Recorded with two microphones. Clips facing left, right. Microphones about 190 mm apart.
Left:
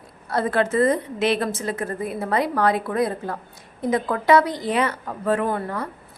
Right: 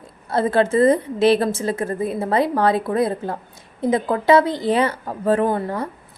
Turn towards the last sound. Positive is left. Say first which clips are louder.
# right 4 dB
turn(degrees=-30)  # may be behind; listen again after turning